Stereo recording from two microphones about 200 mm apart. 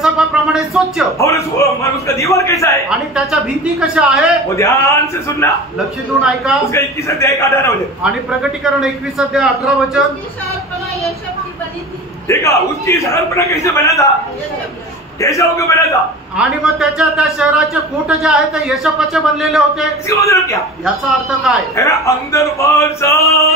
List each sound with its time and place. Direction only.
0.0 s a sound: centre (ahead or behind)
1.1 s a man's voice: 15° left (ahead or behind)
3.8 s a woman's voice: 5° right (ahead or behind)
4.6 s a man's voice: 15° left (ahead or behind)
6.2 s a woman's voice: centre (ahead or behind)
6.7 s a man's voice: 15° left (ahead or behind)
8.0 s a woman's voice: 5° right (ahead or behind)
12.3 s a man's voice: 15° left (ahead or behind)
15.1 s a man's voice: 15° left (ahead or behind)
16.3 s a woman's voice: centre (ahead or behind)
20.1 s a man's voice: 15° left (ahead or behind)
21.7 s a man's voice: 15° left (ahead or behind)